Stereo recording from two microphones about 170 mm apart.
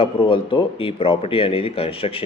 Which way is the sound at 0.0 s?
30° left (ahead or behind).